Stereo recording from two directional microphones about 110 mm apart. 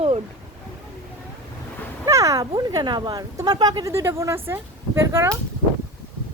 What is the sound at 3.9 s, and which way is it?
Speech, 25° right (ahead or behind).